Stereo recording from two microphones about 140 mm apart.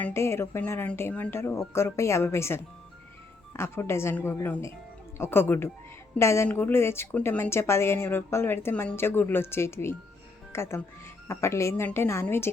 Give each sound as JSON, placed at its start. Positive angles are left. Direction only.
{"t": 0.0, "sound": "a woman's voice", "side_deg": 20}